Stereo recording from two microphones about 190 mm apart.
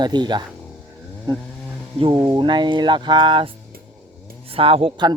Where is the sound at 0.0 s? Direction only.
20° right (ahead or behind).